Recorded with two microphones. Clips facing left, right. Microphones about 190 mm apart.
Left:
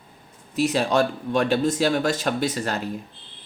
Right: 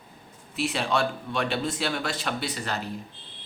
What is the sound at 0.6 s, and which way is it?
Speech, 40° left (ahead or behind).